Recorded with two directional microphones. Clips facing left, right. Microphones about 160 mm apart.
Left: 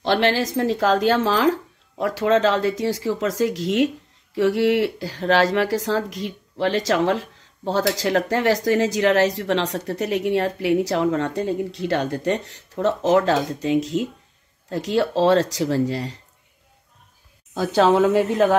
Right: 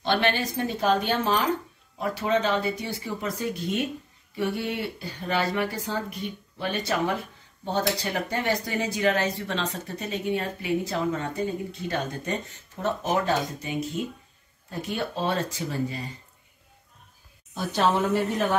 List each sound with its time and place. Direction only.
0.0 s speech: 90° left
17.6 s speech: 90° left